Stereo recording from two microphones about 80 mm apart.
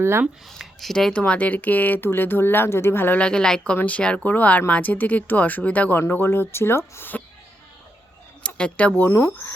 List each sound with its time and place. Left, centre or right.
0.0 s speech: right
0.6 s speech: centre
1.2 s speech: centre
3.2 s a woman's voice: centre; by 7.2 s left
8.4 s speech: centre
9.0 s speech: left